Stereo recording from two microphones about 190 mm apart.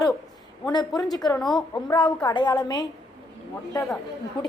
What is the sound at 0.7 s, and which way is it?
A woman's voice, 20° left (ahead or behind).